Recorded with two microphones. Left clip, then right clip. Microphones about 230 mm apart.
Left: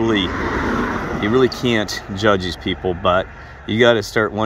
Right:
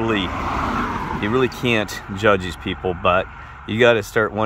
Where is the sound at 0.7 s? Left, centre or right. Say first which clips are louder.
Left 2 dB; centre.